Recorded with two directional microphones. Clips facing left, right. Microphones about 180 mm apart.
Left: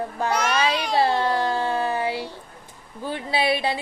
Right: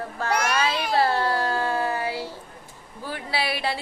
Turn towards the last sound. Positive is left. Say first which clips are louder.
# left 4 dB
turn(degrees=20)  # may be behind; listen again after turning